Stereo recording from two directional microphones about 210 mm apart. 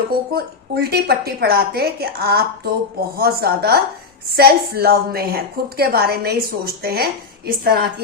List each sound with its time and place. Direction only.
0.1 s a woman's voice: 45° right (ahead or behind)